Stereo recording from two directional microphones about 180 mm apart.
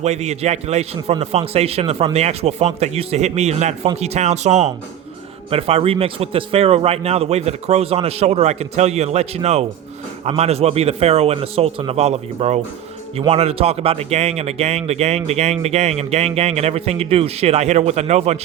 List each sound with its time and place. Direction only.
0.0 s a man's voice: 40° right (ahead or behind)